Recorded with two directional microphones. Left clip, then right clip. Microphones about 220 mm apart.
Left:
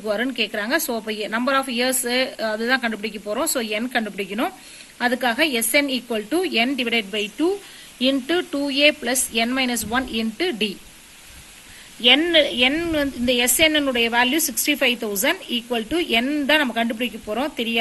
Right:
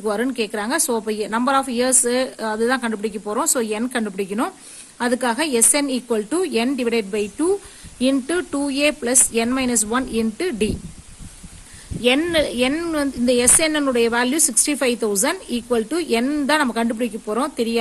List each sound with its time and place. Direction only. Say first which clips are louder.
0.0 s a woman's voice: right 1 dB; 50° right (ahead or behind)
12.0 s a woman's voice: left 2 dB; 55° right (ahead or behind)